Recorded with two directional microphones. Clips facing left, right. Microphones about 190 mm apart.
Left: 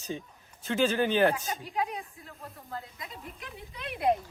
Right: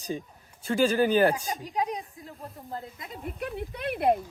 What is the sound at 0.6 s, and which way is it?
Speech, 10° right (ahead or behind).